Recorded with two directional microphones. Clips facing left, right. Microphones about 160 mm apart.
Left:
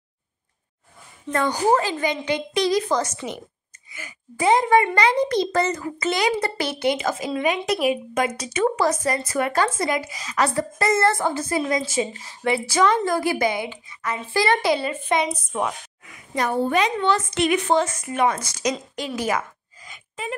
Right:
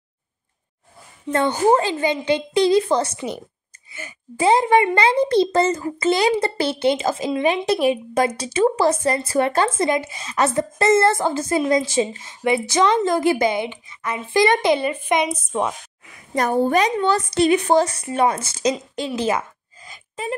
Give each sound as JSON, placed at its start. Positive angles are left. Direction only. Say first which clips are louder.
{"t": 1.3, "sound": "a child's voice", "louder": "right 3 dB", "side_deg": -25}
{"t": 16.3, "sound": "a woman's voice", "louder": "right 3 dB", "side_deg": -45}
{"t": 19.0, "sound": "a sound", "louder": "right 3 dB", "side_deg": -25}